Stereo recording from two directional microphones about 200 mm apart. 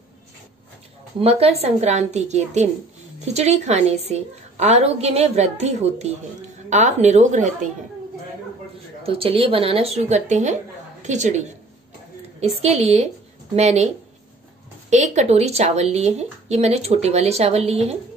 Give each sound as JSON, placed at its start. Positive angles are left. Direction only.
{"t": 1.2, "sound": "speech", "side_deg": -30}
{"t": 9.0, "sound": "speech", "side_deg": -30}
{"t": 14.9, "sound": "speech", "side_deg": -35}